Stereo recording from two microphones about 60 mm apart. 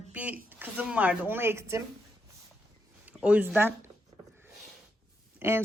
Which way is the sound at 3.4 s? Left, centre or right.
Right.